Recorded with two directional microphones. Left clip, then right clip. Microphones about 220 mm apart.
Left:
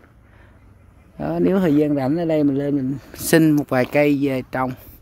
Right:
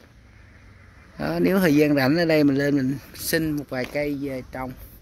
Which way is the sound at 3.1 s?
35° left (ahead or behind).